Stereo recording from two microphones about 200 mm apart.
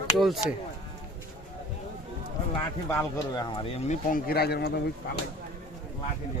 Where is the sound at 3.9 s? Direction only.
45° left (ahead or behind).